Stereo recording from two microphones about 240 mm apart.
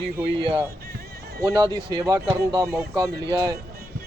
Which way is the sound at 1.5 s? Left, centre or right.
Centre.